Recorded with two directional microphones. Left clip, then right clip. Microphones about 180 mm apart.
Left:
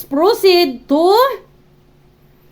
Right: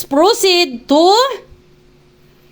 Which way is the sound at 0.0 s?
15° right (ahead or behind).